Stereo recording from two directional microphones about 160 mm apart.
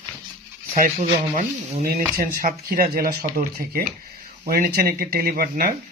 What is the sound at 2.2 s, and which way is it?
Speech, 60° right (ahead or behind).